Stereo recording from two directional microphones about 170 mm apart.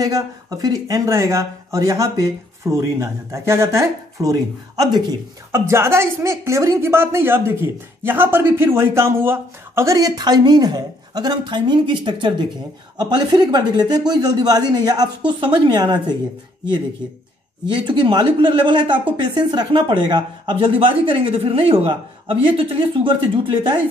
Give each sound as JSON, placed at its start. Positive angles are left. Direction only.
{"t": 0.0, "sound": "a woman's voice", "side_deg": -20}
{"t": 17.6, "sound": "a woman's voice", "side_deg": -30}